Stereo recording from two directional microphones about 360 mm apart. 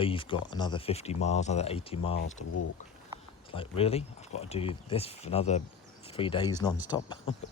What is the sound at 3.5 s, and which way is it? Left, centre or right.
Speech, centre.